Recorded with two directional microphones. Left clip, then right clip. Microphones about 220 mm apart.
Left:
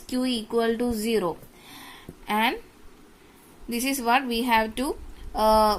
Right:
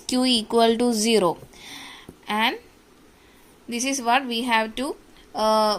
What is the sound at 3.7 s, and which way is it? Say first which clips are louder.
A woman's voice: right 1 dB; centre (ahead or behind).